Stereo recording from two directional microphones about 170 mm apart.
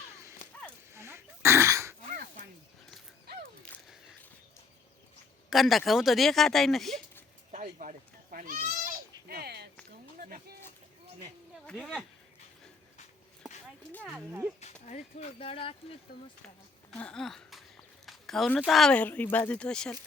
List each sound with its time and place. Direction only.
0.9 s throat clearing: 15° right (ahead or behind)
3.7 s a sound: 5° left (ahead or behind)
5.5 s speech: centre (ahead or behind)
7.5 s goat: 50° right (ahead or behind)
9.3 s a sound: 70° right (ahead or behind)
11.6 s speech: 5° left (ahead or behind)
14.6 s speech: 40° left (ahead or behind)
16.1 s speech: 70° left (ahead or behind)
16.9 s a sound: 5° left (ahead or behind)
18.6 s speech: centre (ahead or behind)